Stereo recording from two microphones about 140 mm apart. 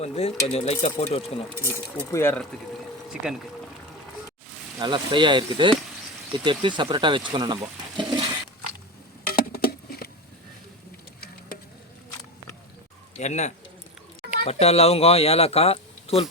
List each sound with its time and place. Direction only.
0.0 s speech: 45° left (ahead or behind)
2.1 s speech: 15° left (ahead or behind)
3.1 s speech: 5° right (ahead or behind)
4.8 s speech: 35° right (ahead or behind)
7.3 s water: 30° right (ahead or behind)
9.2 s patter: 90° left
13.1 s speech: 55° left (ahead or behind)